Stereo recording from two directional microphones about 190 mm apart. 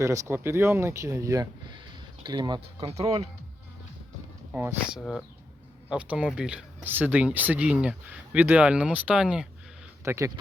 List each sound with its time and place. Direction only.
0.0 s speech: 15° right (ahead or behind); by 3.2 s 30° right (ahead or behind)
4.5 s speech: 5° right (ahead or behind)
10.0 s speech: 15° right (ahead or behind)